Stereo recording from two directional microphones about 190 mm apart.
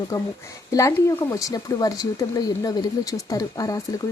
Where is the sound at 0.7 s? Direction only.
15° left (ahead or behind).